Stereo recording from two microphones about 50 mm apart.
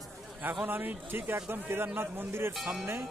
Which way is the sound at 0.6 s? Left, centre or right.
Right.